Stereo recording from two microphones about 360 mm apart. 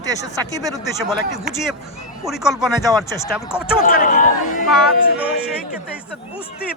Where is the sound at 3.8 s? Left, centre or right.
Left.